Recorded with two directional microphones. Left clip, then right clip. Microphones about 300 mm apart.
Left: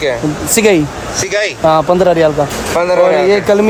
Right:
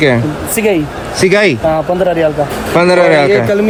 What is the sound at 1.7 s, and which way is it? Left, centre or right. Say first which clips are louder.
Speech: left 3 dB; left.